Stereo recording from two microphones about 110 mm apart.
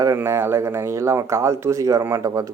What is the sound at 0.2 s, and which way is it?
Speech, 20° right (ahead or behind).